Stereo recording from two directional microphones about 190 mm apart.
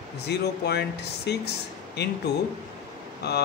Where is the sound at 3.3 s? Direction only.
60° left (ahead or behind).